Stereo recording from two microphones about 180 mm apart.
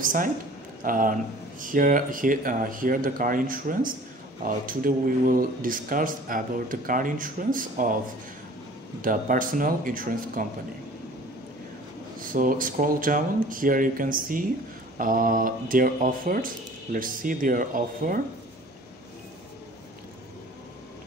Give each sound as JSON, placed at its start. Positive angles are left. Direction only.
{"t": 0.0, "sound": "speech", "side_deg": -50}
{"t": 9.0, "sound": "speech", "side_deg": -50}
{"t": 12.2, "sound": "speech", "side_deg": -50}